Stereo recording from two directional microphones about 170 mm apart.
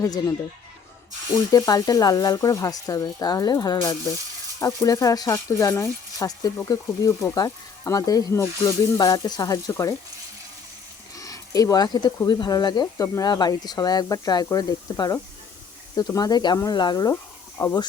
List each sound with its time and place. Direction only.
0.0 s speech: 20° left (ahead or behind)
1.5 s speech: 20° left (ahead or behind)
11.1 s speech: 20° left (ahead or behind)